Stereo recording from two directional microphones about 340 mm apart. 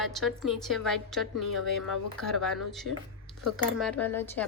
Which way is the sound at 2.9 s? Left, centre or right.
Left.